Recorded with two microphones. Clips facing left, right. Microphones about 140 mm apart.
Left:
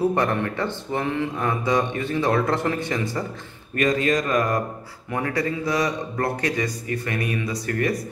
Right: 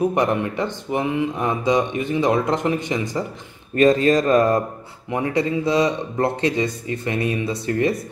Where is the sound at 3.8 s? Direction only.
30° right (ahead or behind).